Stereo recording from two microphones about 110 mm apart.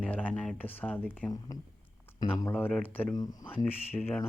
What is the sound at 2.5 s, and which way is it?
Speech, 15° left (ahead or behind).